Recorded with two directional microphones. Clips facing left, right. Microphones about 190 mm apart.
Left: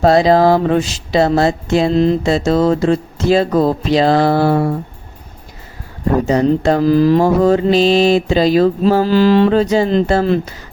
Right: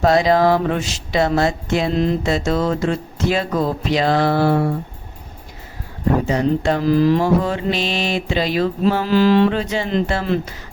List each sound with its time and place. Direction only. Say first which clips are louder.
0.0 s speech: left 4 dB; 35° left (ahead or behind)
6.2 s speech: left 5 dB; 40° left (ahead or behind)